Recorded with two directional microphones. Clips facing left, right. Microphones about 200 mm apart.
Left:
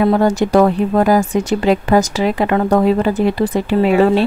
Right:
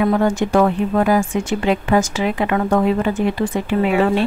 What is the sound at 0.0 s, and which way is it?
Speech, 35° left (ahead or behind).